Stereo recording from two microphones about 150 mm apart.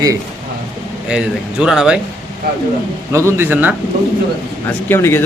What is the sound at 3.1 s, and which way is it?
Speech, 15° right (ahead or behind).